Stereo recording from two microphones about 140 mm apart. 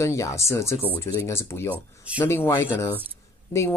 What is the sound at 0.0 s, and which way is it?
Speech, 20° left (ahead or behind).